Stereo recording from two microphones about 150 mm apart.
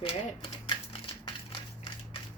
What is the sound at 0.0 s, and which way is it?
Speech, 40° left (ahead or behind).